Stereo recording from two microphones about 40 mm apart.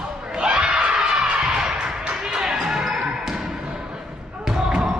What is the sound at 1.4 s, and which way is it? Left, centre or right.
Music, centre.